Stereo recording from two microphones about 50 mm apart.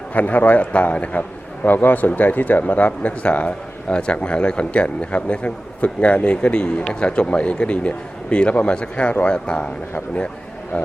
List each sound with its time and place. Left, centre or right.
0.1 s a man's voice: left
1.6 s a man's voice: left
10.7 s speech: left